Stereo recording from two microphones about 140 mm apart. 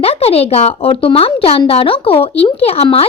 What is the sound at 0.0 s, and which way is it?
Speech, 45° left (ahead or behind).